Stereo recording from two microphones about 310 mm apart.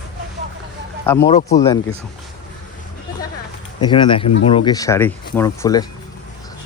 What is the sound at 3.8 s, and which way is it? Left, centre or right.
Speech, centre.